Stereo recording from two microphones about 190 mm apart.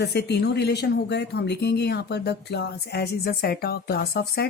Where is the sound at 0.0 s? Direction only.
60° left (ahead or behind).